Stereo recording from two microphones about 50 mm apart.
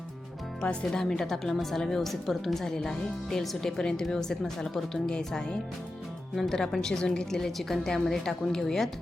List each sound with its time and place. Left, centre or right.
0.6 s speech: left
0.9 s a woman's voice: centre
6.3 s a woman's voice: centre